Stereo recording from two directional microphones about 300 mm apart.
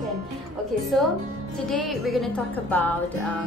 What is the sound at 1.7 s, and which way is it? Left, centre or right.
A woman's voice, centre.